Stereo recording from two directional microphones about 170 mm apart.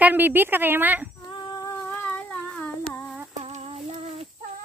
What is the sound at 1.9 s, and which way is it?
Humming, 10° left (ahead or behind).